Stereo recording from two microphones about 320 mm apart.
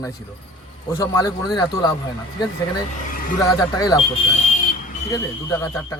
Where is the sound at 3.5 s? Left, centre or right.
Centre.